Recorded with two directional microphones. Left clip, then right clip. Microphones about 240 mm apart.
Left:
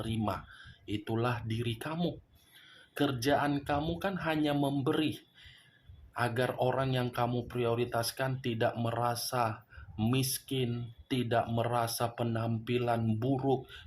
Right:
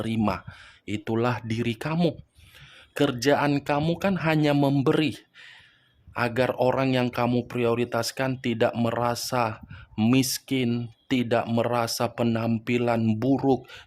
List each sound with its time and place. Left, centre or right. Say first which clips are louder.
0.2 s speech: right 8 dB; right